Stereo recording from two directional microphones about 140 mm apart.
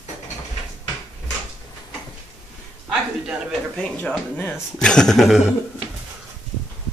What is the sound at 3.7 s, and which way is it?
Speech, 5° left (ahead or behind).